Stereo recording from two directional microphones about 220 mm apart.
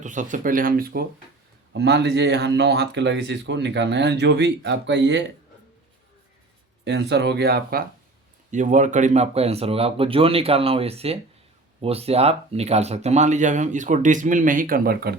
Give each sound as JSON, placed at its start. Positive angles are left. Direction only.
{"t": 0.0, "sound": "speech", "side_deg": -35}
{"t": 6.8, "sound": "speech", "side_deg": -50}